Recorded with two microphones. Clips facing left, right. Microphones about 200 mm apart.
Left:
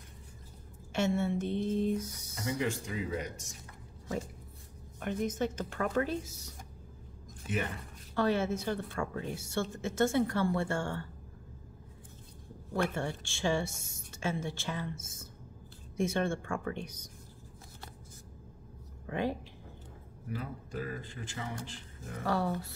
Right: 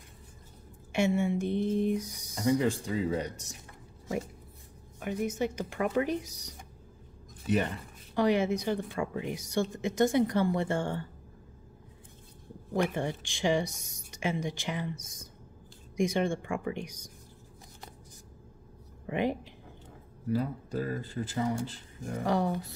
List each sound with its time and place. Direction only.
0.9 s a woman's voice: 10° right (ahead or behind)
2.3 s speech: 35° right (ahead or behind)
5.0 s a woman's voice: 10° right (ahead or behind)
7.4 s speech: 35° right (ahead or behind)
8.1 s a woman's voice: 15° right (ahead or behind)
12.7 s a woman's voice: 15° right (ahead or behind)
19.0 s speech: 15° right (ahead or behind)
20.2 s speech: 35° right (ahead or behind)
22.2 s a woman's voice: 15° right (ahead or behind)